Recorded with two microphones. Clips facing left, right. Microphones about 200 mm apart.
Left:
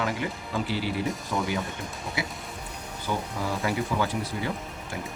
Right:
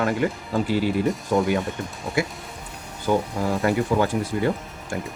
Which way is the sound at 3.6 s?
50° right (ahead or behind).